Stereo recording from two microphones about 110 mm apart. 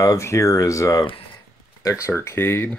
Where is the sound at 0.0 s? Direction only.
30° left (ahead or behind).